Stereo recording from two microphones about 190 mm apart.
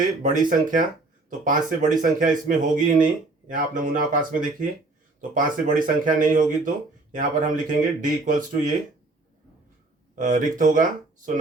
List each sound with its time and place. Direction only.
0.0 s speech: 45° right (ahead or behind)
10.2 s speech: 45° right (ahead or behind)